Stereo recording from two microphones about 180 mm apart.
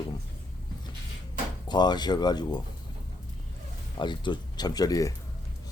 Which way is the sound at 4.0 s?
25° left (ahead or behind).